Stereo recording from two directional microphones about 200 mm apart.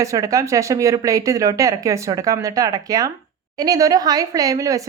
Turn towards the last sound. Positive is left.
turn(degrees=-15)  # may be behind; listen again after turning